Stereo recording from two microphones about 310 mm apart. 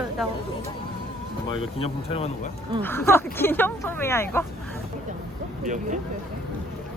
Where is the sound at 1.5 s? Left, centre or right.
Centre.